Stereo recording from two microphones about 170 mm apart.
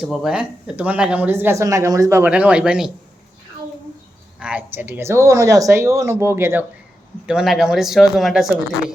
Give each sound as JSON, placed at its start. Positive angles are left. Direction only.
{"t": 0.0, "sound": "speech", "side_deg": -5}
{"t": 4.4, "sound": "speech", "side_deg": -5}
{"t": 7.3, "sound": "speech", "side_deg": -5}